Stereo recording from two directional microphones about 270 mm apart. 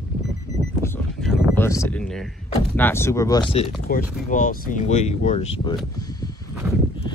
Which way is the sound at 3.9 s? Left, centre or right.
Left.